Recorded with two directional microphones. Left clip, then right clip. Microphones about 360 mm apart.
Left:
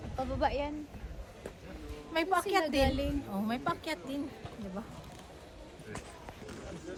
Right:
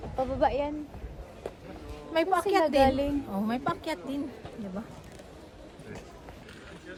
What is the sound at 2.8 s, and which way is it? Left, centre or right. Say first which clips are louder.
Speech: right 7 dB; right.